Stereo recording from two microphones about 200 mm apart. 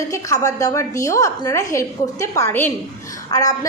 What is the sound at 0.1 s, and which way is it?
A woman's voice, 15° left (ahead or behind).